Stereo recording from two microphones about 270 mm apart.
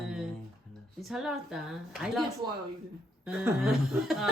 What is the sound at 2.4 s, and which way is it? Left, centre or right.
Speech, centre.